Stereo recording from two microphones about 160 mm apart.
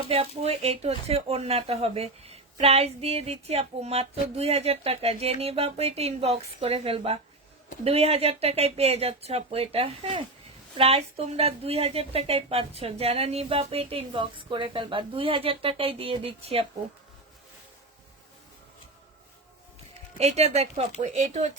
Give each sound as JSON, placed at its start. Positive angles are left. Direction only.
{"t": 0.1, "sound": "speech", "side_deg": -40}
{"t": 20.1, "sound": "speech", "side_deg": -40}